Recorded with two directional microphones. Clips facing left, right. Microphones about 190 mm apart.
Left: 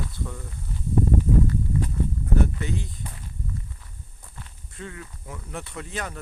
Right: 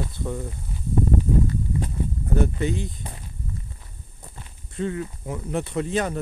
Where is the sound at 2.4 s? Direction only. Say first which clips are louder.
Right 4 dB; 20° right (ahead or behind).